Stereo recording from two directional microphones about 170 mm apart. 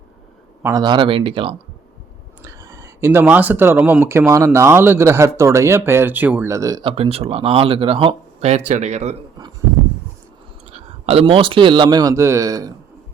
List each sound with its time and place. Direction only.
0.6 s speech: 20° right (ahead or behind)
2.4 s speech: 20° right (ahead or behind)
6.9 s speech: 35° right (ahead or behind)
10.7 s a man's voice: 35° right (ahead or behind); by 12.7 s 20° right (ahead or behind)